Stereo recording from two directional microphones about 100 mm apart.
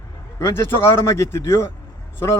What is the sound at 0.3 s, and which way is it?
A man's voice, 30° left (ahead or behind).